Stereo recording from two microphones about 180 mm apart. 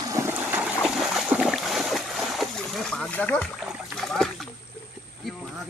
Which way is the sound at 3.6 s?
Centre (ahead or behind).